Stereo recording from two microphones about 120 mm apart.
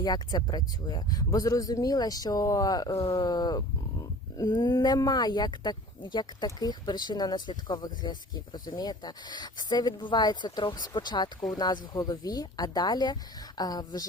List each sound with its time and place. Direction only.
0.0 s speech: 35° left (ahead or behind)
3.0 s speech: 50° left (ahead or behind)
3.2 s speech: 35° left (ahead or behind)